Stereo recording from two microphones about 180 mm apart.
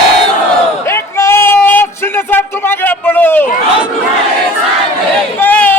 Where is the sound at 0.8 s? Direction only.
15° left (ahead or behind).